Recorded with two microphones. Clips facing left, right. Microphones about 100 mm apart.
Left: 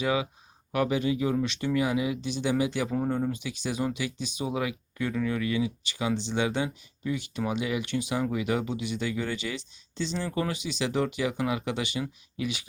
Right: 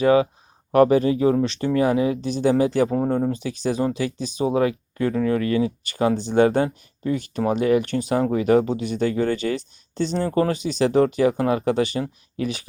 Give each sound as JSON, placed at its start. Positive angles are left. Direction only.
{"t": 0.0, "sound": "speech", "side_deg": -45}